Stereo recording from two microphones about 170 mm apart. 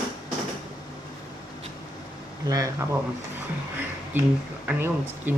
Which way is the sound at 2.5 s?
20° right (ahead or behind).